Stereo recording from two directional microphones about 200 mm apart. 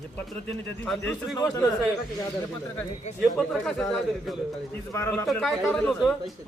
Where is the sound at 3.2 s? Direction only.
Centre (ahead or behind).